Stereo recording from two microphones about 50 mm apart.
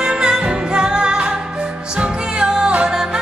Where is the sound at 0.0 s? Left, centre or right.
Centre.